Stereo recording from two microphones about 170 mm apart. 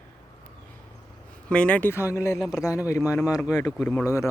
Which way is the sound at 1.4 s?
5° left (ahead or behind).